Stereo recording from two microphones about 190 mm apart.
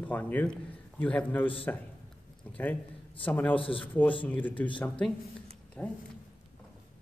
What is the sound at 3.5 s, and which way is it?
Speech, 25° left (ahead or behind).